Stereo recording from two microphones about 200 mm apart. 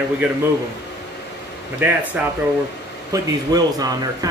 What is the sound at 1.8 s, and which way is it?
Speech, 10° right (ahead or behind).